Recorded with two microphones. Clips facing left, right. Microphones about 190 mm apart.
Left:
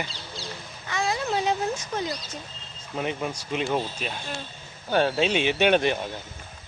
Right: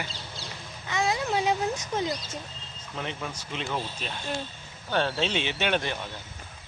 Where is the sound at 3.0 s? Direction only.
15° left (ahead or behind).